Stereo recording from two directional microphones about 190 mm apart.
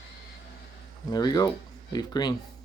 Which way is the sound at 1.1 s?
20° left (ahead or behind).